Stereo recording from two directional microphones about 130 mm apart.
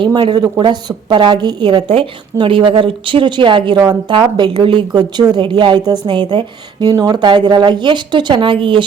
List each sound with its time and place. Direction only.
0.0 s a woman's voice: 35° right (ahead or behind)